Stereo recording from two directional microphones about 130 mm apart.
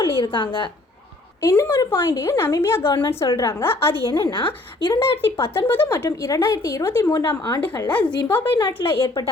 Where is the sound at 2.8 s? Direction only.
35° left (ahead or behind).